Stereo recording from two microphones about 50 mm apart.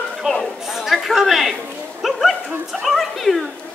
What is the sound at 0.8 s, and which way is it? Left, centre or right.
Chatter, centre.